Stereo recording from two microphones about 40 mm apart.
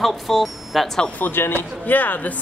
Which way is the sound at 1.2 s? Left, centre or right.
Left.